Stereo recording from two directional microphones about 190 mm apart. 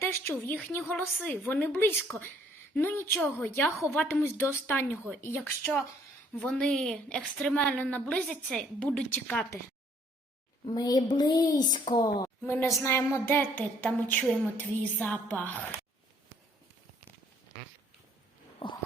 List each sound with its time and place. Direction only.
0.0 s a woman's voice: 10° left (ahead or behind)
10.7 s speech: 20° left (ahead or behind)
12.4 s a woman's voice: 10° left (ahead or behind)
18.6 s a sound: 30° left (ahead or behind)